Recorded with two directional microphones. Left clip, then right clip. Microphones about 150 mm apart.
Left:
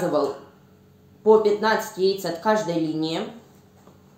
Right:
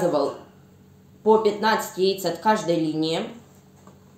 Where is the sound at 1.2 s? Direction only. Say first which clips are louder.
Left 1 dB; 10° right (ahead or behind).